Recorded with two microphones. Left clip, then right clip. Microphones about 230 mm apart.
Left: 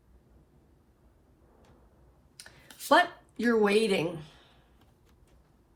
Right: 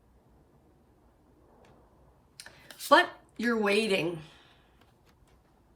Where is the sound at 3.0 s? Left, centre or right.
Centre.